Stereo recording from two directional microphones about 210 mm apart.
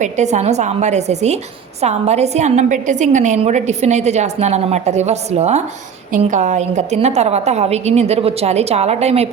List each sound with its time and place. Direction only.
0.0 s a woman's voice: 35° right (ahead or behind)